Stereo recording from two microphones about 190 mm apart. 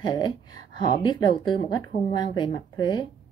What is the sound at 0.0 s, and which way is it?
Speech, 25° left (ahead or behind).